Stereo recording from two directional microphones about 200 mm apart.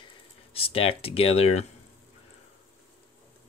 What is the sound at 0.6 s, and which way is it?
Speech, 30° left (ahead or behind).